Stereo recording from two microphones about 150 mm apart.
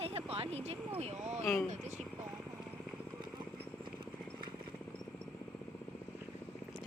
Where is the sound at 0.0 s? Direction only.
40° right (ahead or behind).